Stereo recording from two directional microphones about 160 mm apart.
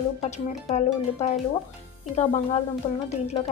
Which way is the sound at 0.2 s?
45° left (ahead or behind).